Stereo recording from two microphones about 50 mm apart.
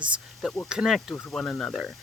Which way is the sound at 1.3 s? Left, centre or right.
Centre.